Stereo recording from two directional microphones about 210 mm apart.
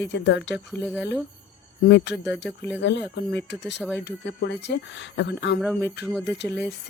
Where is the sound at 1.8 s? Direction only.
55° left (ahead or behind).